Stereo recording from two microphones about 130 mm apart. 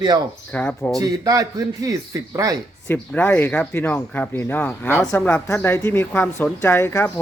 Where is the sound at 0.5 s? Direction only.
15° left (ahead or behind).